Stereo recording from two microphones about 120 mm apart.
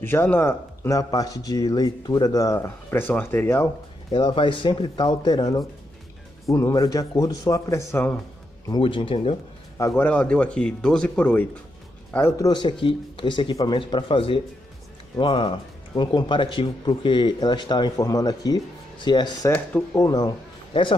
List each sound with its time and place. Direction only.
0.0 s speech: 15° left (ahead or behind)
4.1 s speech: 45° left (ahead or behind); by 8.2 s 20° left (ahead or behind)
8.8 s speech: 45° left (ahead or behind)
9.8 s a man's voice: 25° left (ahead or behind)
10.0 s speech: 10° left (ahead or behind)
12.1 s speech: 20° left (ahead or behind)
12.4 s speech: 40° left (ahead or behind)
15.9 s speech: 35° left (ahead or behind)